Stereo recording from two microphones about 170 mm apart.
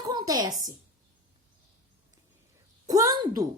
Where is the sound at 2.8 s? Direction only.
20° right (ahead or behind).